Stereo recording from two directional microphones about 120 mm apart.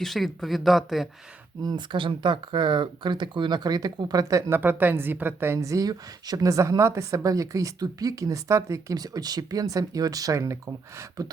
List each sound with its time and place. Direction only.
0.0 s speech: centre (ahead or behind)
1.6 s speech: 40° right (ahead or behind)
11.2 s a sound: 30° right (ahead or behind)